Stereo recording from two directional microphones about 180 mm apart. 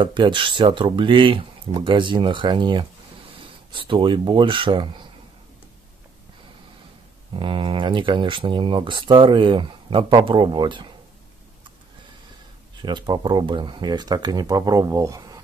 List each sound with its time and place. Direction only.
0.0 s speech: 25° right (ahead or behind)
7.3 s speech: 30° right (ahead or behind)
12.7 s speech: 25° right (ahead or behind)